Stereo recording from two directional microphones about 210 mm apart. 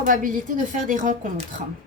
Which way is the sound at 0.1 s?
40° right (ahead or behind).